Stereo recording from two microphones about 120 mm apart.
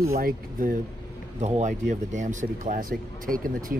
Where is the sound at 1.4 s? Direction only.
85° right.